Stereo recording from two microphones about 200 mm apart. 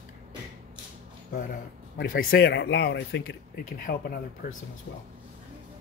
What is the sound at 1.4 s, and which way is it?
Speech, 45° left (ahead or behind).